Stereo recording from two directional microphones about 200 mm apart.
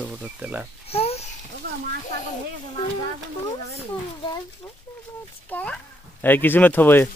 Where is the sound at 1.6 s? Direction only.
50° right (ahead or behind).